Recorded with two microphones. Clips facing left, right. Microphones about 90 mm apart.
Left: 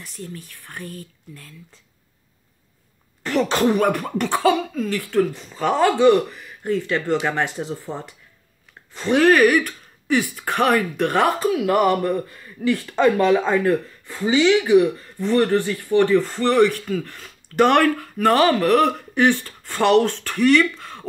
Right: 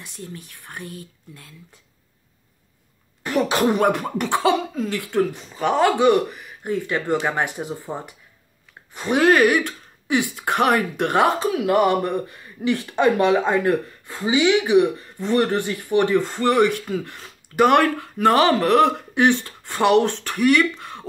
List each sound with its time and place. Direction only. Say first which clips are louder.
0.0 s speech: left 1 dB; 25° right (ahead or behind)
3.3 s speech: left 1 dB; 10° right (ahead or behind)
17.6 s speech: even; 10° right (ahead or behind)
17.8 s speech: even; 20° right (ahead or behind)